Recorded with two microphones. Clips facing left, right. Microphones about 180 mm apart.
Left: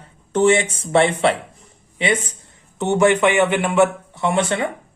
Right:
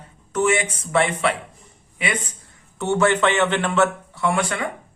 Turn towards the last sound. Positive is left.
turn(degrees=25)  # may be behind; listen again after turning